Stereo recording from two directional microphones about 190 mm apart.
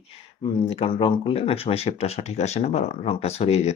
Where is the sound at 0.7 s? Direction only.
30° left (ahead or behind).